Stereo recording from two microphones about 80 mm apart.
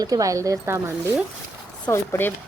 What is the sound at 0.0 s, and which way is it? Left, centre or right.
Speech, right.